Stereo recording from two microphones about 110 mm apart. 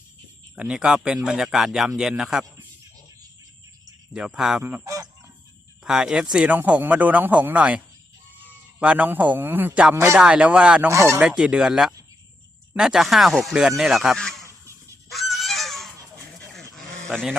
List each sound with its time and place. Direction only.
0.5 s speech: 10° right (ahead or behind)
4.1 s speech: 5° right (ahead or behind)
4.8 s fowl: 30° right (ahead or behind)
5.8 s speech: 5° right (ahead or behind)
8.8 s speech: 10° right (ahead or behind)
10.2 s speech: 10° right (ahead or behind)
10.9 s speech: 25° right (ahead or behind)
11.2 s speech: 10° right (ahead or behind)
15.1 s goose: centre (ahead or behind)
16.5 s dog: 5° left (ahead or behind)
17.1 s speech: centre (ahead or behind)